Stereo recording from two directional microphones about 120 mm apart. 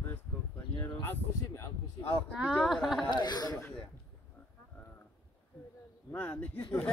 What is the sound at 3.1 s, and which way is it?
Speech, 35° left (ahead or behind).